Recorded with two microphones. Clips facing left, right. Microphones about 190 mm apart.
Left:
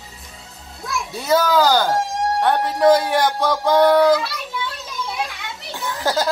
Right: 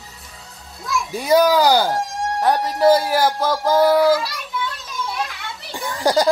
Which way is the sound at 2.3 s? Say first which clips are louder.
Right 1 dB; 5° right (ahead or behind).